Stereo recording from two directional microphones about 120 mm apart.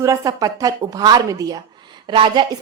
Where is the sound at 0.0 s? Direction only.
30° right (ahead or behind).